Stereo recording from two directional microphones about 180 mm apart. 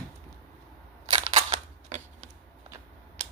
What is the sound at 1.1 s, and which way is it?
Single-lens reflex camera, 35° right (ahead or behind).